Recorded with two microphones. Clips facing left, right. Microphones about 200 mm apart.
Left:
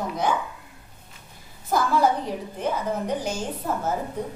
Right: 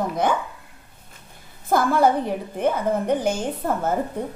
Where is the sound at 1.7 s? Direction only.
55° right (ahead or behind).